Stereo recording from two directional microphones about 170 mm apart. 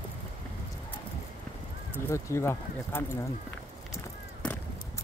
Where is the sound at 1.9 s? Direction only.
15° left (ahead or behind).